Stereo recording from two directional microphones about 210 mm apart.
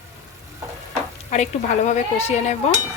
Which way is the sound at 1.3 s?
35° left (ahead or behind).